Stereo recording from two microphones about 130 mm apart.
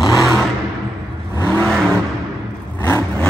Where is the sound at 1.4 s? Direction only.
10° left (ahead or behind).